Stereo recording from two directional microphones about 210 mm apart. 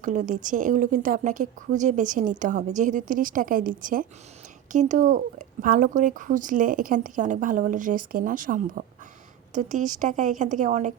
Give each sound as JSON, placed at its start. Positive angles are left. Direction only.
{"t": 0.0, "sound": "speech", "side_deg": -35}